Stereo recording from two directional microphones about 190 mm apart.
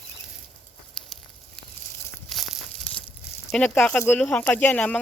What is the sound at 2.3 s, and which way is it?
Tearing, centre (ahead or behind).